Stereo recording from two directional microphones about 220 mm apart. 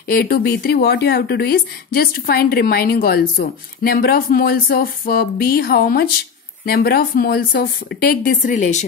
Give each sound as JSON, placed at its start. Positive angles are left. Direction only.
{"t": 0.1, "sound": "speech", "side_deg": 45}